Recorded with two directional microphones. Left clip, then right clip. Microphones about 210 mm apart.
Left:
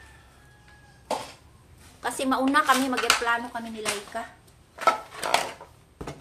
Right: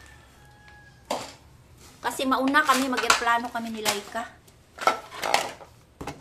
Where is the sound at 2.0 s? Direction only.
Centre (ahead or behind).